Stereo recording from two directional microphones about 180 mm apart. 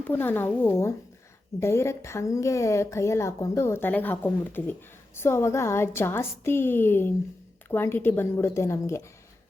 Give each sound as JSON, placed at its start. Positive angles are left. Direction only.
{"t": 0.1, "sound": "a woman's voice", "side_deg": 10}